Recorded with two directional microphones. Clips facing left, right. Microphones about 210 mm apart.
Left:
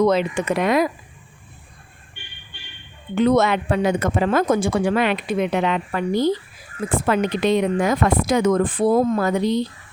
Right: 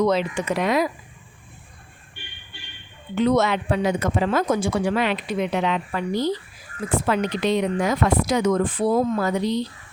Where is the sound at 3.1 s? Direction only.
50° left (ahead or behind).